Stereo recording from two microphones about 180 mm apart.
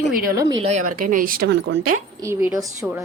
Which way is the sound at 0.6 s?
40° right (ahead or behind).